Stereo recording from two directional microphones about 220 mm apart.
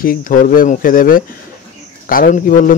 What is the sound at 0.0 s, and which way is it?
Speech, 40° left (ahead or behind).